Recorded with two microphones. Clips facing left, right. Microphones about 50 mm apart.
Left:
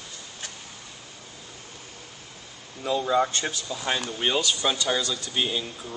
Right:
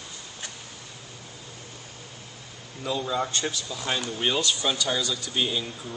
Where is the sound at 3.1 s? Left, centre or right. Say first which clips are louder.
Left 6 dB; centre.